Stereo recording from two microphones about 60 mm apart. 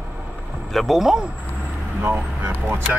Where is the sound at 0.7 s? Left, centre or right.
Centre.